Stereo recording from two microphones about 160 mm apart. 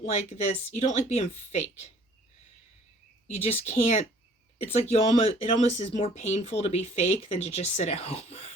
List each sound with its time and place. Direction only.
0.0 s speech: 45° left (ahead or behind)
3.4 s speech: 40° left (ahead or behind)